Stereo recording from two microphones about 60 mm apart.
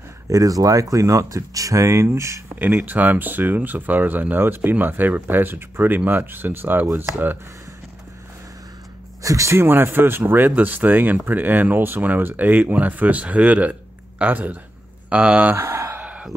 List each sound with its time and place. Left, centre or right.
0.3 s speech: right
2.8 s speech: right
9.2 s speech: right
9.6 s speech: right
15.5 s a sound: right
16.0 s chicken: right